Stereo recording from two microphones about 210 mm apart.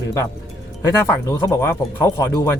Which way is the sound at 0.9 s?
15° left (ahead or behind).